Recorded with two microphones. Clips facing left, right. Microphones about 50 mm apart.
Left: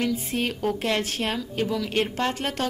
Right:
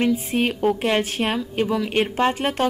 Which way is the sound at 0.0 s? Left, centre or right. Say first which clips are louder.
Right 5 dB; right.